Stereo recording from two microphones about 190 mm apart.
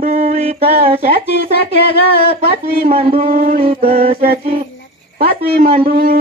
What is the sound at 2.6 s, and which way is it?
Speech, 50° right (ahead or behind).